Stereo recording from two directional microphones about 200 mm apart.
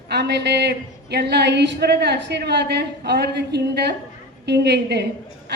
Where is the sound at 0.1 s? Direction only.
55° right (ahead or behind).